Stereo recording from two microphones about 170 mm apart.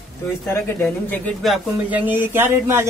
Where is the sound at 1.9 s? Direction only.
10° right (ahead or behind).